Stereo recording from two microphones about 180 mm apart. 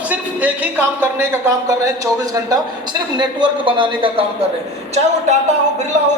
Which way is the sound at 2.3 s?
20° right (ahead or behind).